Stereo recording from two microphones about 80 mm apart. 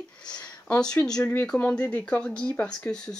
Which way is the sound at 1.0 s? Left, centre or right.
Centre.